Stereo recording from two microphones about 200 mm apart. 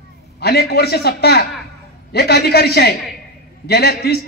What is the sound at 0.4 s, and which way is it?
A man's voice, 55° left (ahead or behind).